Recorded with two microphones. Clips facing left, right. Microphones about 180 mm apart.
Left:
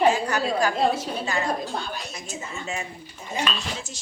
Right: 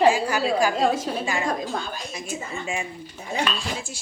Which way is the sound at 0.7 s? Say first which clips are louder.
Right 1 dB; 45° right (ahead or behind).